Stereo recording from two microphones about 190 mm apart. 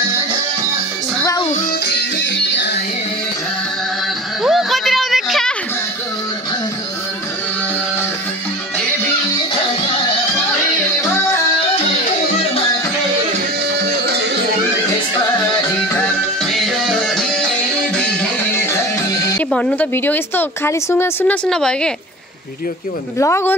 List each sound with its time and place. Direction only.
1.2 s music: 20° left (ahead or behind)
1.9 s music: 65° left (ahead or behind)
4.4 s a sound: centre (ahead or behind)
11.0 s music: 15° left (ahead or behind)
12.3 s music: 35° left (ahead or behind)
13.7 s music: 60° right (ahead or behind)
16.5 s music: centre (ahead or behind)
19.5 s speech: 5° left (ahead or behind)
23.1 s speech: 15° left (ahead or behind)